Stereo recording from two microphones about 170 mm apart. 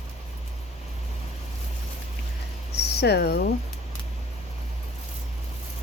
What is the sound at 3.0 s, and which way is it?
Speech, 75° left (ahead or behind).